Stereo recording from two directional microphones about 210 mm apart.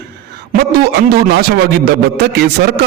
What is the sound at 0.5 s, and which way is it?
A man's voice, 50° right (ahead or behind).